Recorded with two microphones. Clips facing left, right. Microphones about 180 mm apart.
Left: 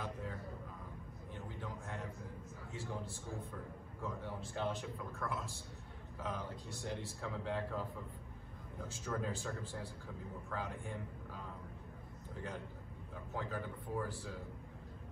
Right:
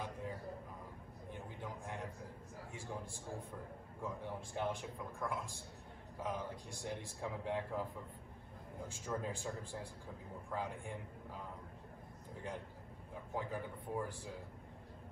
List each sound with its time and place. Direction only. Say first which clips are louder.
1.3 s a sound: left 1 dB; 15° right (ahead or behind)
2.7 s a man's voice: left 3 dB; 15° right (ahead or behind)
13.3 s a man's voice: even; 15° right (ahead or behind)